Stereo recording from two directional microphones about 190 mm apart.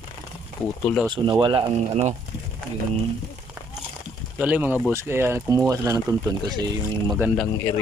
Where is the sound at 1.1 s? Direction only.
25° right (ahead or behind).